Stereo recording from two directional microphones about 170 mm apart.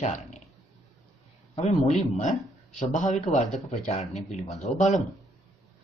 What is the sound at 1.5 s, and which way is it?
A man's voice, 40° left (ahead or behind).